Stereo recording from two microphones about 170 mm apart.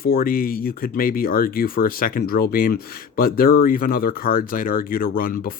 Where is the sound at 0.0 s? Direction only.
60° left (ahead or behind).